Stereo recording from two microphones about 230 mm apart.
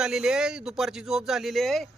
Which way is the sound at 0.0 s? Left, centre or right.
Centre.